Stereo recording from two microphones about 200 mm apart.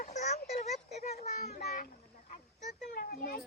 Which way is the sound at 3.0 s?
50° left (ahead or behind).